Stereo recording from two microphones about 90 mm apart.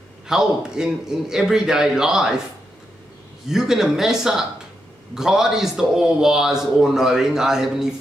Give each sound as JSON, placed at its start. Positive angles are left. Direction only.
{"t": 0.3, "sound": "a man's voice", "side_deg": -5}
{"t": 3.4, "sound": "a man's voice", "side_deg": -5}